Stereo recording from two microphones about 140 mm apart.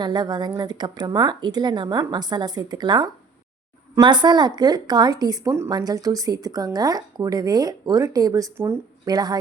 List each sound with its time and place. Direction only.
0.0 s speech: 30° right (ahead or behind)
9.0 s speech: 30° right (ahead or behind)